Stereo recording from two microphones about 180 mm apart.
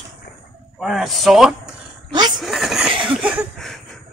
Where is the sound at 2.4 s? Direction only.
Centre (ahead or behind).